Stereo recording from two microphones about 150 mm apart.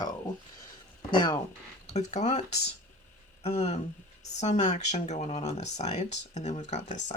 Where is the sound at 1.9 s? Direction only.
50° left (ahead or behind).